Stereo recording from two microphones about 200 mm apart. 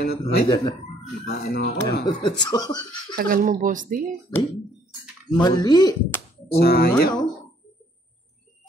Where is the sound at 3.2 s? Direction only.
40° right (ahead or behind).